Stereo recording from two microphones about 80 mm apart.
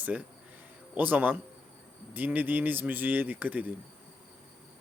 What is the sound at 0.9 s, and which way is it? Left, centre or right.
Speech, right.